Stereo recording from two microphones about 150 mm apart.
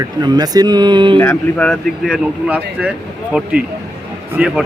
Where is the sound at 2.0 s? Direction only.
10° right (ahead or behind).